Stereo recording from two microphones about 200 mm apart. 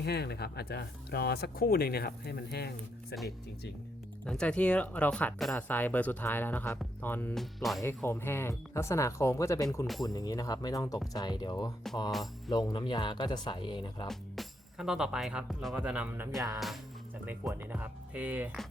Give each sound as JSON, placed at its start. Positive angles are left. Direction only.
{"t": 0.0, "sound": "speech", "side_deg": 55}
{"t": 4.3, "sound": "speech", "side_deg": 5}
{"t": 7.8, "sound": "speech", "side_deg": 10}
{"t": 9.8, "sound": "speech", "side_deg": 0}
{"t": 10.1, "sound": "speech", "side_deg": 20}
{"t": 14.1, "sound": "speech", "side_deg": 0}